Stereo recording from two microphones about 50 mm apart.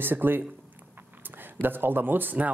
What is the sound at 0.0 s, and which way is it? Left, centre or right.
Speech, right.